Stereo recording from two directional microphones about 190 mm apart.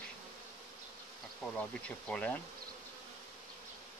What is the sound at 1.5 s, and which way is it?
Speech, 5° left (ahead or behind).